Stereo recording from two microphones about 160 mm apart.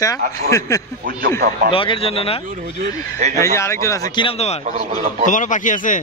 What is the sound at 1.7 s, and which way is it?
Speech, 35° left (ahead or behind).